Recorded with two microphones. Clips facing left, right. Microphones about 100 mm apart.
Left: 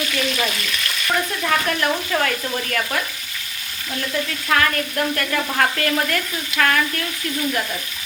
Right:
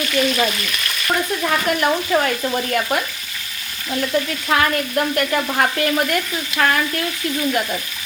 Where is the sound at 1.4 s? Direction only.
15° right (ahead or behind).